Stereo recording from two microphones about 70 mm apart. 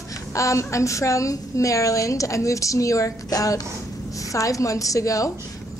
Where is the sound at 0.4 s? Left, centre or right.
Left.